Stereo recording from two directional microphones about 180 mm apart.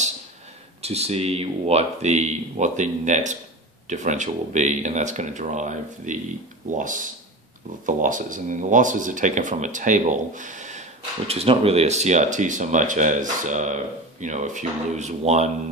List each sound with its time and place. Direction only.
0.8 s speech: 35° right (ahead or behind)